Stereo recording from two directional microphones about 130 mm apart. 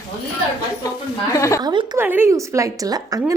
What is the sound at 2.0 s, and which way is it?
Speech, 15° right (ahead or behind).